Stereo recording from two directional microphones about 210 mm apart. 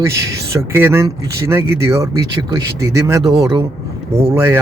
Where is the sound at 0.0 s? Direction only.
15° right (ahead or behind).